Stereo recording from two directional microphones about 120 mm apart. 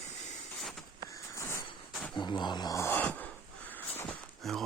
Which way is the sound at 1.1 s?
25° left (ahead or behind).